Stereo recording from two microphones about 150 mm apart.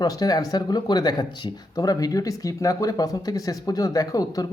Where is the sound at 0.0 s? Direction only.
25° left (ahead or behind).